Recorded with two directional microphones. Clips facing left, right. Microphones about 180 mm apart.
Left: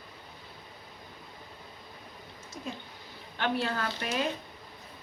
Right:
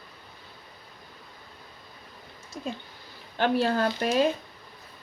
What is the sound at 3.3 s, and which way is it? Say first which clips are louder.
Speech: right 7 dB; 35° right (ahead or behind).